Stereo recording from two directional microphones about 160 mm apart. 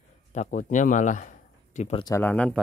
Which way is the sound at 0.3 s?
50° left (ahead or behind).